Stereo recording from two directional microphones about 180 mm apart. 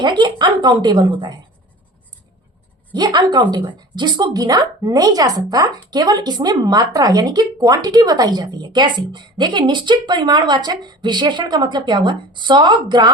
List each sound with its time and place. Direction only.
0.0 s a woman's voice: 25° right (ahead or behind)
2.9 s a woman's voice: 25° right (ahead or behind)